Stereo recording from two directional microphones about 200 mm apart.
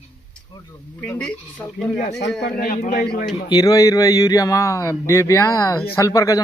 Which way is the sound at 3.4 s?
20° left (ahead or behind).